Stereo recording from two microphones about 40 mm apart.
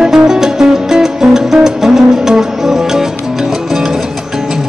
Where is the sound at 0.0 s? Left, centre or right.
Centre.